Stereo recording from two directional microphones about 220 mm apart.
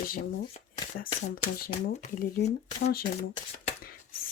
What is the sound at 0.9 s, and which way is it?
Speech, 40° left (ahead or behind).